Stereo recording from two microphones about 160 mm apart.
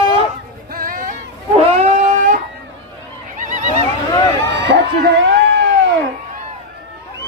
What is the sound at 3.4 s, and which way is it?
Neigh, 50° right (ahead or behind).